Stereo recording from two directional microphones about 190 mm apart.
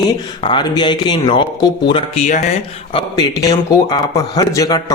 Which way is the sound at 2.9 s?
20° left (ahead or behind).